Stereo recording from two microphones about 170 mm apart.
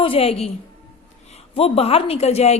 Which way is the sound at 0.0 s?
35° left (ahead or behind).